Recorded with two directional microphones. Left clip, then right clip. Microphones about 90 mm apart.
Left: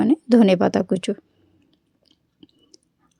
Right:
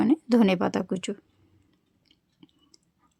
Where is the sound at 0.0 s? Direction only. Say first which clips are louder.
Left 6 dB; 35° left (ahead or behind).